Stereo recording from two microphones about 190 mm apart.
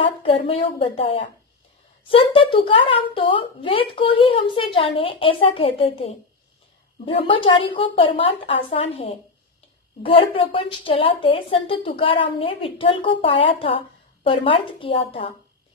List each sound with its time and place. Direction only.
0.0 s a woman's voice: 30° left (ahead or behind)